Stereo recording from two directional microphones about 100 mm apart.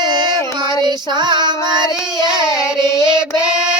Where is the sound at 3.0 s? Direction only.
10° right (ahead or behind).